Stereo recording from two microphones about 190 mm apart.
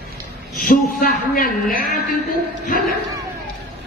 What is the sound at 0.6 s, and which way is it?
A man's voice, 45° left (ahead or behind).